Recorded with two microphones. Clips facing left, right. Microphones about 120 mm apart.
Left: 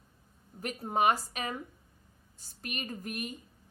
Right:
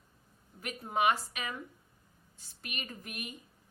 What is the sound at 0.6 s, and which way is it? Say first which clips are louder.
A woman's voice: left 2 dB; 40° left (ahead or behind).